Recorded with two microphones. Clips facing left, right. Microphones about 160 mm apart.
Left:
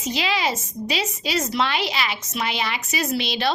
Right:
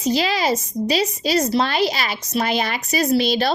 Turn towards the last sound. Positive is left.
turn(degrees=-40)  # may be behind; listen again after turning